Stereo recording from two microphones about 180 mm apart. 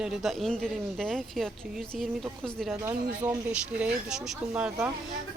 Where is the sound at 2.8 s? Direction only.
20° right (ahead or behind).